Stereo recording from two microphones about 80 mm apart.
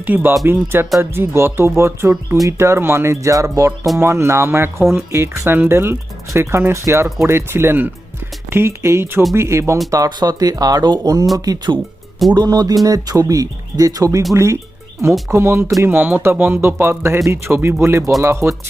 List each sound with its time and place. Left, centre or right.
0.0 s speech: right
9.9 s speech: right